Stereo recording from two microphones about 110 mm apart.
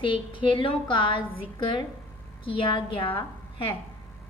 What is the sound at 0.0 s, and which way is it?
A woman's voice, 50° left (ahead or behind).